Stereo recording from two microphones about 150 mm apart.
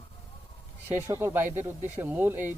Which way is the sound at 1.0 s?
15° right (ahead or behind).